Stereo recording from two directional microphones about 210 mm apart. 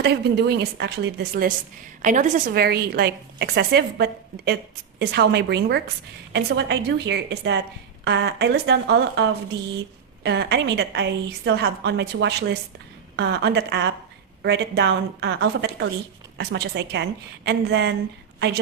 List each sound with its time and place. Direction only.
0.0 s a woman's voice: 50° right (ahead or behind)
10.2 s a woman's voice: 55° right (ahead or behind)